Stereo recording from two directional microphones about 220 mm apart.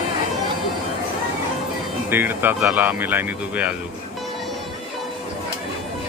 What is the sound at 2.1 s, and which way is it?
Speech, 10° right (ahead or behind).